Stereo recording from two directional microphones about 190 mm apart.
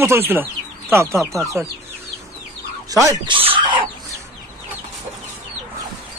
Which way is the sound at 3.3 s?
30° right (ahead or behind).